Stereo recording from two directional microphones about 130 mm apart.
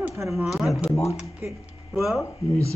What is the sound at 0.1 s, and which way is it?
Speech, centre (ahead or behind).